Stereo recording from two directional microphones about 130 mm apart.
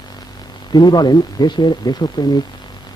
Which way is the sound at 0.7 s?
35° left (ahead or behind).